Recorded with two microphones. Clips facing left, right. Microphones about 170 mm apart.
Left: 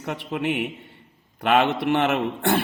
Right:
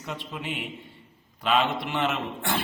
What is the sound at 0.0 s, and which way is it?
Speech, 60° left (ahead or behind).